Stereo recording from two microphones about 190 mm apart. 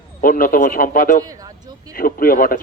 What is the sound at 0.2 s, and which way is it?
A man's voice, 45° left (ahead or behind).